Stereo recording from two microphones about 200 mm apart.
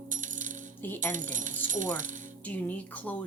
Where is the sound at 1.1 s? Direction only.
40° right (ahead or behind).